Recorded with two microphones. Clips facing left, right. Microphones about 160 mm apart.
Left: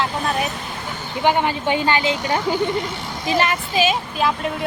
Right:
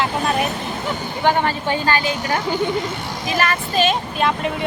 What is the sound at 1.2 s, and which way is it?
Speech, 15° left (ahead or behind).